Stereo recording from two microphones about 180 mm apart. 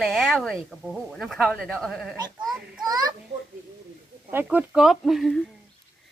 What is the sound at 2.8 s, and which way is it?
Speech, 20° right (ahead or behind).